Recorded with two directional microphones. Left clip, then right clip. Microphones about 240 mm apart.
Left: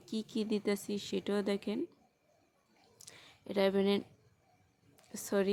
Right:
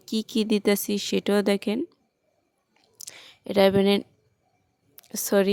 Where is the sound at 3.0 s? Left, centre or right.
Right.